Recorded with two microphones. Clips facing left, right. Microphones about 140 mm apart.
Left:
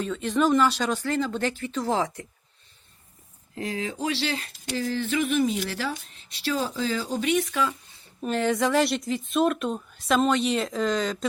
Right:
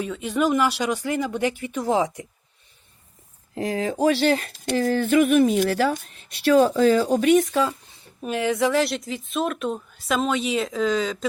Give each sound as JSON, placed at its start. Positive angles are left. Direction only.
{"t": 0.0, "sound": "speech", "side_deg": -10}
{"t": 3.5, "sound": "speech", "side_deg": -35}
{"t": 4.0, "sound": "speech", "side_deg": -50}
{"t": 8.2, "sound": "speech", "side_deg": -5}